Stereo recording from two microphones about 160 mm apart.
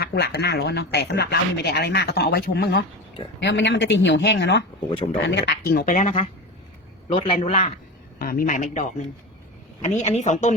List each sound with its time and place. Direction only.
0.0 s speech: 90° left
5.9 s speech: 50° left (ahead or behind)
7.1 s a man's voice: 35° left (ahead or behind)
8.2 s a man's voice: 65° left (ahead or behind); by 10.5 s 50° left (ahead or behind)